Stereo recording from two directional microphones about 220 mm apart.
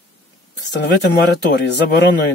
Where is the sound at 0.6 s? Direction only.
50° left (ahead or behind).